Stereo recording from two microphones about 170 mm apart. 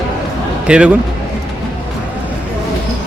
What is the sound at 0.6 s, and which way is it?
Speech, 5° right (ahead or behind).